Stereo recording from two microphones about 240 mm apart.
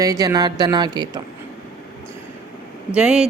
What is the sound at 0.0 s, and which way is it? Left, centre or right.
Speech, centre.